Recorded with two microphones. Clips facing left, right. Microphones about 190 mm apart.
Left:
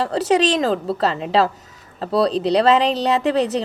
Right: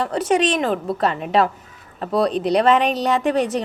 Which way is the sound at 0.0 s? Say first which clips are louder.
Left 1 dB; 30° left (ahead or behind).